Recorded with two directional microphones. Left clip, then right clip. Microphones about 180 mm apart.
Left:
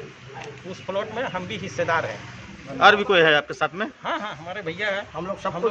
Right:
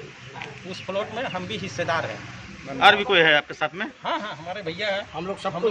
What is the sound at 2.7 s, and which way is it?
A man's voice, 50° left (ahead or behind).